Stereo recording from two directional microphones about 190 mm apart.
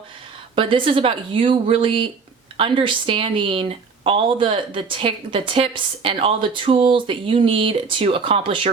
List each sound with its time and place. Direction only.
0.5 s speech: 25° right (ahead or behind)